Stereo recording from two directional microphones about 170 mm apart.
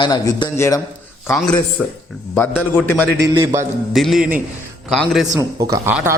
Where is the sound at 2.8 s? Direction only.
10° left (ahead or behind).